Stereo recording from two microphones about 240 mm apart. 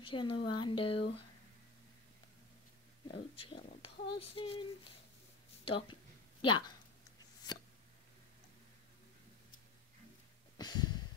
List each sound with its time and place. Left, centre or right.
0.0 s speech: centre
3.1 s speech: left
5.7 s speech: left
10.6 s a sound: centre